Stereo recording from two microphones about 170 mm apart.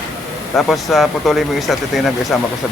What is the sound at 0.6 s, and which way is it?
Speech, centre (ahead or behind).